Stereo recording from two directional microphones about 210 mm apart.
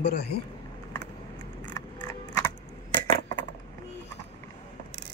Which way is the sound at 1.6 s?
15° left (ahead or behind).